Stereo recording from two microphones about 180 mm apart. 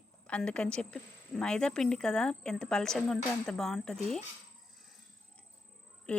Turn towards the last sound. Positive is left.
turn(degrees=10)  # may be behind; listen again after turning